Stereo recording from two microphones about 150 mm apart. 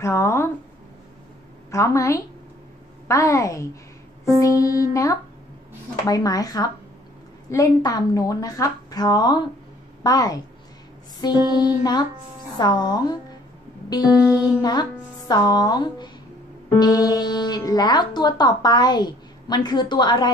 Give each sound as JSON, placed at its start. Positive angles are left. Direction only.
{"t": 0.0, "sound": "a sound", "side_deg": 20}
{"t": 1.7, "sound": "speech", "side_deg": 20}
{"t": 14.2, "sound": "music", "side_deg": -5}
{"t": 14.6, "sound": "speech", "side_deg": 25}